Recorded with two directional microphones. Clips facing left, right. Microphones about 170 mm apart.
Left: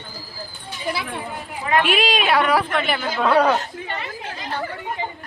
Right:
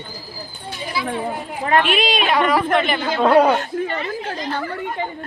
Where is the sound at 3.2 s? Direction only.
30° right (ahead or behind).